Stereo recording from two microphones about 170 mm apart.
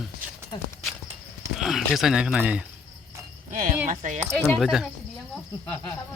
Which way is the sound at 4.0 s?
45° right (ahead or behind).